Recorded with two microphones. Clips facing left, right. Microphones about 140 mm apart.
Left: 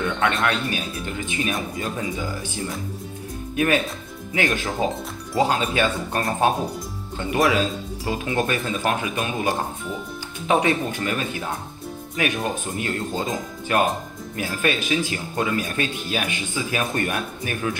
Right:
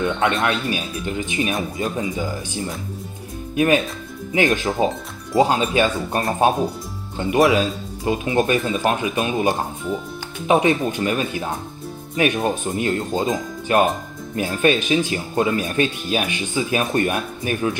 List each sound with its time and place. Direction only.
0.0 s speech: 25° right (ahead or behind)
3.5 s speech: 20° right (ahead or behind)